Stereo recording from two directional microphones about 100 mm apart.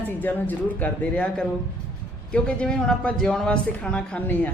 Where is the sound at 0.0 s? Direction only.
20° left (ahead or behind).